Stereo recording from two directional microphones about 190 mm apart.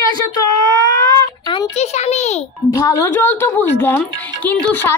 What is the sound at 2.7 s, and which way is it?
Speech, 15° left (ahead or behind).